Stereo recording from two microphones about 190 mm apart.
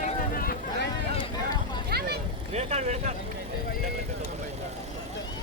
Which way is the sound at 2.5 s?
35° right (ahead or behind).